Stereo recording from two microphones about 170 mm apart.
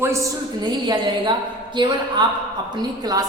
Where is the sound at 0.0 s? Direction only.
15° right (ahead or behind).